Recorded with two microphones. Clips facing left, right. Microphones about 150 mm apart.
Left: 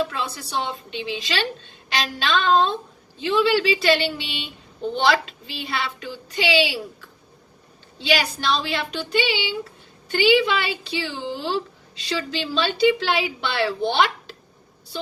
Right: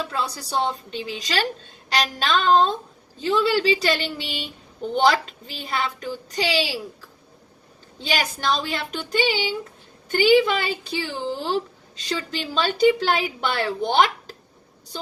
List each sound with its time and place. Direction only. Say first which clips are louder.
0.1 s a woman's voice: right 2 dB; 35° right (ahead or behind)
7.9 s a woman's voice: left 3 dB; 45° right (ahead or behind)